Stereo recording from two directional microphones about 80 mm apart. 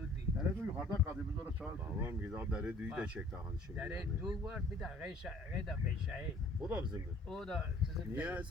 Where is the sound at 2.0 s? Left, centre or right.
Right.